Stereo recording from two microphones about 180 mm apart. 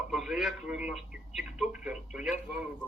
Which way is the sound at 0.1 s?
5° right (ahead or behind).